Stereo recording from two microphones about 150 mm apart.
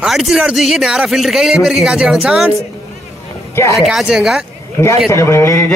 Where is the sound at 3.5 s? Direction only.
20° left (ahead or behind).